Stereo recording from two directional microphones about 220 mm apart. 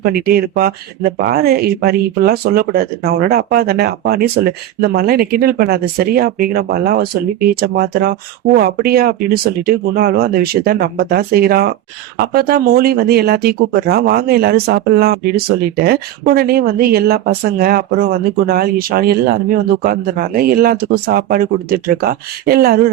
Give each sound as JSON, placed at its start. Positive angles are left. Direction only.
{"t": 0.0, "sound": "speech", "side_deg": -45}